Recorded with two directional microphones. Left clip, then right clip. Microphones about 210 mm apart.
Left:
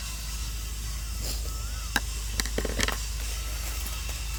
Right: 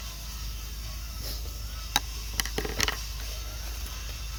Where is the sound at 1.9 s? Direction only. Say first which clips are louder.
Right 1 dB; 30° right (ahead or behind).